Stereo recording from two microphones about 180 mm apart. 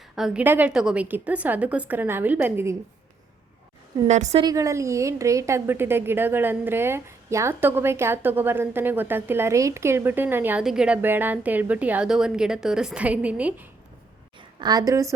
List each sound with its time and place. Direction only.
0.2 s a woman's voice: 5° right (ahead or behind)
4.0 s a woman's voice: 40° right (ahead or behind)
4.4 s a woman's voice: 20° right (ahead or behind)
14.6 s a woman's voice: 20° right (ahead or behind)